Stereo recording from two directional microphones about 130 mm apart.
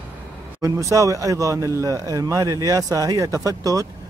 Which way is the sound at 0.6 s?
25° right (ahead or behind).